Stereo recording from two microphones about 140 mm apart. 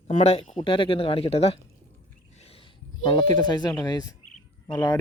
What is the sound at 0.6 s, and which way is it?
Speech, 40° left (ahead or behind).